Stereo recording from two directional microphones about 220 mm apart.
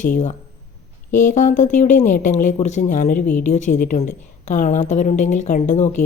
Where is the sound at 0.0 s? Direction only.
35° left (ahead or behind).